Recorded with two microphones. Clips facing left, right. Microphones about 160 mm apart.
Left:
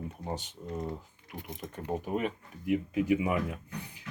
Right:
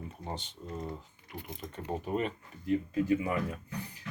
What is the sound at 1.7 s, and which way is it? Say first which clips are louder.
Speech: left 1 dB; 5° left (ahead or behind).